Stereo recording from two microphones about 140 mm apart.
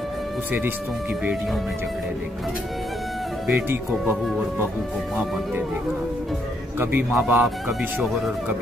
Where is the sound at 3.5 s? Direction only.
15° right (ahead or behind).